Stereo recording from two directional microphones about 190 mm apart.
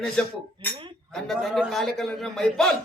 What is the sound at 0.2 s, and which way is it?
A man's voice, 5° left (ahead or behind).